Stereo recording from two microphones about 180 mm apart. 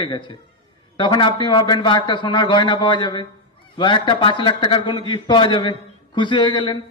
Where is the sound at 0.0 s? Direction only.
25° left (ahead or behind).